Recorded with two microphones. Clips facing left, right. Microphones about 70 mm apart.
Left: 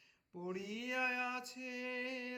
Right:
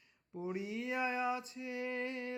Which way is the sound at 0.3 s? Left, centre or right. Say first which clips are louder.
Right 4 dB; right.